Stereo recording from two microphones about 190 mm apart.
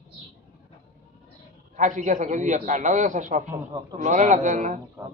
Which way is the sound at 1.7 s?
40° right (ahead or behind).